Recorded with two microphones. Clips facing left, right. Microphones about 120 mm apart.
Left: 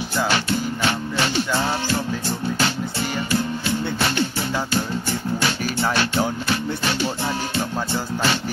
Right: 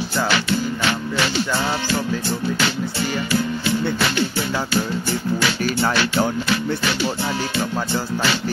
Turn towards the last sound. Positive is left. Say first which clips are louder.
# right 2 dB
turn(degrees=40)  # may be behind; listen again after turning